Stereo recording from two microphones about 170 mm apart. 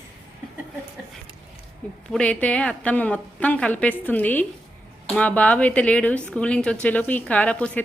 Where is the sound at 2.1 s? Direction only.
5° left (ahead or behind).